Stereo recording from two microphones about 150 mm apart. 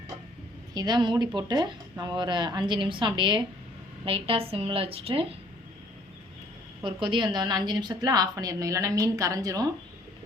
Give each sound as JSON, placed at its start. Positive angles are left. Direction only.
{"t": 0.7, "sound": "a woman's voice", "side_deg": -25}
{"t": 6.8, "sound": "a woman's voice", "side_deg": -30}